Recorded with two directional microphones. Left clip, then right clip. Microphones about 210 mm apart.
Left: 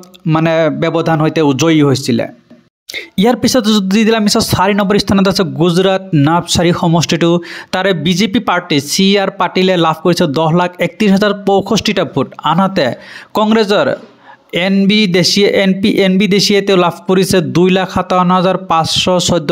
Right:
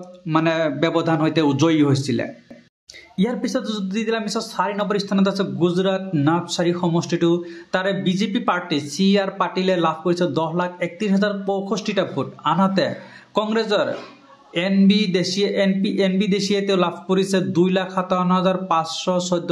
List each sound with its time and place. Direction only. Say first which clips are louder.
0.3 s speech: left 8 dB; 40° left (ahead or behind)
2.9 s speech: left 13 dB; 45° left (ahead or behind)